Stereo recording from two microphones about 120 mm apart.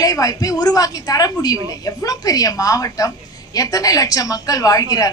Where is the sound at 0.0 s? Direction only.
30° left (ahead or behind).